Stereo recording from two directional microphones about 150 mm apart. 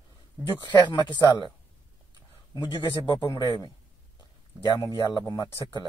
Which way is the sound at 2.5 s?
30° left (ahead or behind).